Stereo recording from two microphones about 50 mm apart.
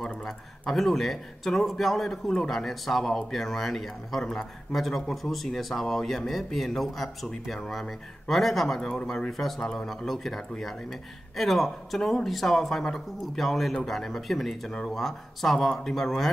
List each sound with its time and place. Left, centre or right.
0.0 s a man's voice: centre